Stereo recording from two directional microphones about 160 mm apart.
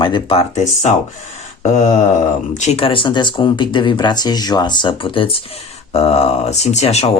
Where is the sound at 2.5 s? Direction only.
40° left (ahead or behind).